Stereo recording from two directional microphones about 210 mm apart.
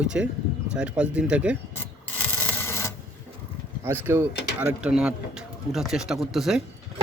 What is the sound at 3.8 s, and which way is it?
Speech, 10° right (ahead or behind).